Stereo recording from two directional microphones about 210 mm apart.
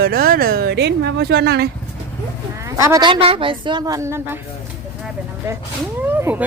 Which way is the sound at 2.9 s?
20° right (ahead or behind).